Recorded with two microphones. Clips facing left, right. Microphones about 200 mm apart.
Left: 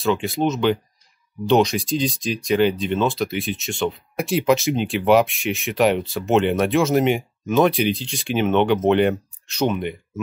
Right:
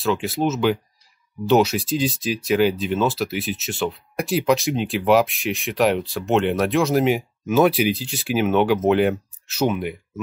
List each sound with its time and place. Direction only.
0.0 s speech: centre (ahead or behind)